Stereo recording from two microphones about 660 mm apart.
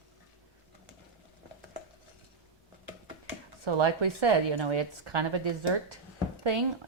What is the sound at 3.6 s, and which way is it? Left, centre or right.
Speech, right.